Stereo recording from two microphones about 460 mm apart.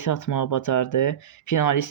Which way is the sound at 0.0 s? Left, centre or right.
Left.